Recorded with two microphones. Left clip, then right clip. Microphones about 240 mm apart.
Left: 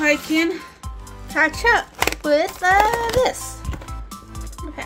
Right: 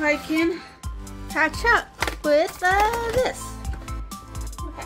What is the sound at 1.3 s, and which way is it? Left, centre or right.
Music, centre.